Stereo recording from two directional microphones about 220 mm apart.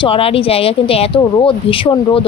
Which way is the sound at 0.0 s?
25° left (ahead or behind).